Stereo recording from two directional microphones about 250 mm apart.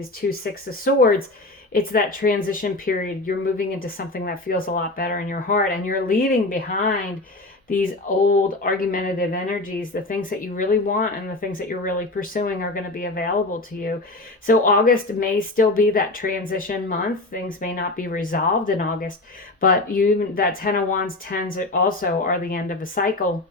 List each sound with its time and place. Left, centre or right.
0.2 s speech: left
1.7 s speech: left
8.3 s speech: left